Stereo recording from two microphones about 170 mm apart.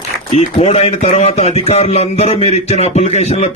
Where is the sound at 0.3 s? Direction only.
35° left (ahead or behind).